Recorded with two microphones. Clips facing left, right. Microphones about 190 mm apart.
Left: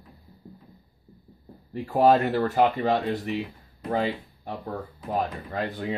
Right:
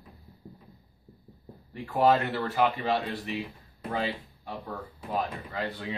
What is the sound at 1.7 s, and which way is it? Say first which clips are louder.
Speech: left 4 dB; 40° left (ahead or behind).